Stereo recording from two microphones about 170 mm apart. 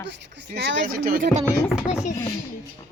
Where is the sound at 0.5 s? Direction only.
75° right (ahead or behind); by 1.3 s 60° right (ahead or behind).